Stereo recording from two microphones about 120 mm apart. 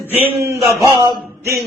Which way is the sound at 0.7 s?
25° right (ahead or behind).